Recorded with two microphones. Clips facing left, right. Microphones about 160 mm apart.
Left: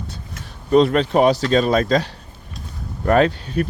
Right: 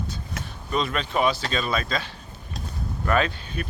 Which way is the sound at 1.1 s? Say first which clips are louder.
Left 7 dB; 40° left (ahead or behind).